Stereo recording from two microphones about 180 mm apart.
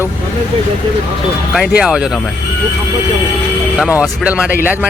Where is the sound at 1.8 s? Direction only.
5° right (ahead or behind).